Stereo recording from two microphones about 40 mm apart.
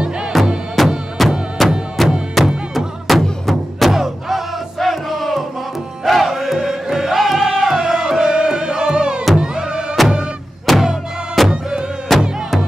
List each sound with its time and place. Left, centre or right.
0.3 s music: centre
7.6 s crowd: centre
8.1 s music: centre
10.7 s music: centre
12.1 s music: centre